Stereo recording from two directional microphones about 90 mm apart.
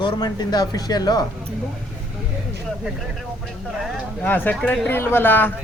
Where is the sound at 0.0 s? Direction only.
50° left (ahead or behind).